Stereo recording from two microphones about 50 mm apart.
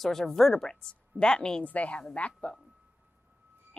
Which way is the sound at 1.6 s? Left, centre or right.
Left.